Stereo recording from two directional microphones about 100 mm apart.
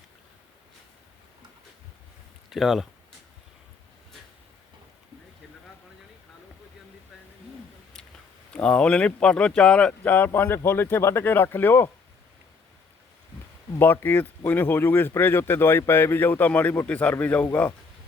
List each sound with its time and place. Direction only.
2.5 s speech: centre (ahead or behind)
8.5 s speech: 10° left (ahead or behind)
13.7 s speech: 20° left (ahead or behind)